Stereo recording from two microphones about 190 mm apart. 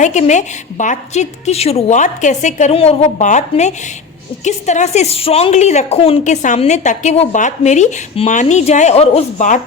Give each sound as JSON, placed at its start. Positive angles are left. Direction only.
{"t": 0.0, "sound": "a woman's voice", "side_deg": 40}